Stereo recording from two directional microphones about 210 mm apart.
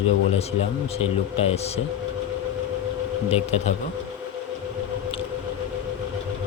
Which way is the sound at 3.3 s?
30° left (ahead or behind).